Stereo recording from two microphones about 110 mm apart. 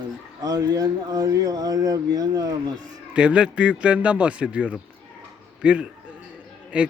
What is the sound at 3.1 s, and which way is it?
A man's voice, 10° right (ahead or behind).